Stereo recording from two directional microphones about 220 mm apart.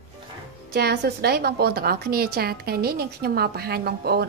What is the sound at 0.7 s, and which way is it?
A woman's voice, 45° right (ahead or behind).